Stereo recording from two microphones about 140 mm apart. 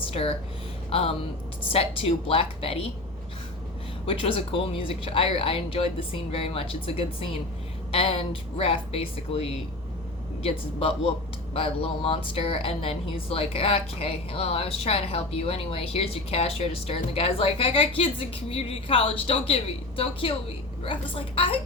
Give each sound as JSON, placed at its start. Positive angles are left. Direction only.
{"t": 0.0, "sound": "a woman's voice", "side_deg": 40}
{"t": 4.0, "sound": "a woman's voice", "side_deg": 40}